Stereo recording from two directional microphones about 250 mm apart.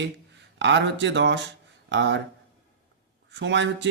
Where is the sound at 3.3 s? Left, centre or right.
Right.